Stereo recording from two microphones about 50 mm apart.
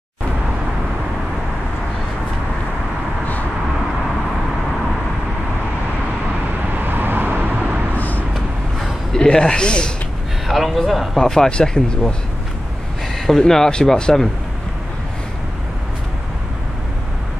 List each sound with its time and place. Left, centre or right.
6.8 s vehicle: right
8.7 s a sound: centre
9.2 s speech: centre
10.5 s a man's voice: centre
11.1 s speech: centre
13.4 s speech: centre